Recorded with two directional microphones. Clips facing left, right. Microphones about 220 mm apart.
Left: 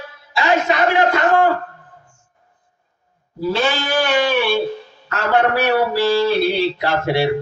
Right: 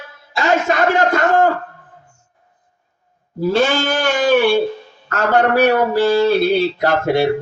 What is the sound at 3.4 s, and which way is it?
Goat, 50° right (ahead or behind).